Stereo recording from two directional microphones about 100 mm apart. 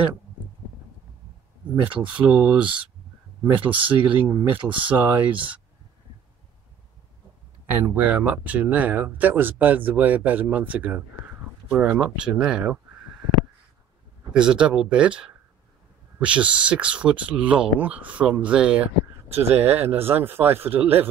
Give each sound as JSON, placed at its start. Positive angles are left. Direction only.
{"t": 1.9, "sound": "speech", "side_deg": -10}
{"t": 7.8, "sound": "speech", "side_deg": -15}
{"t": 14.3, "sound": "speech", "side_deg": -10}
{"t": 19.6, "sound": "speech", "side_deg": -20}